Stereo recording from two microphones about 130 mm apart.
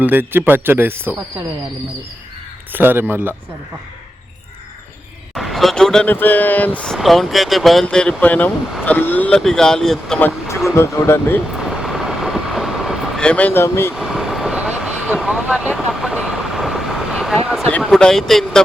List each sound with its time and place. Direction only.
0.0 s speech: 15° right (ahead or behind)
2.7 s speech: 15° right (ahead or behind)
5.3 s speech: centre (ahead or behind)
10.2 s speech: 15° left (ahead or behind)
11.5 s vehicle: centre (ahead or behind); by 13.9 s 20° left (ahead or behind)
13.9 s vehicle: 5° right (ahead or behind)
17.7 s speech: 10° left (ahead or behind)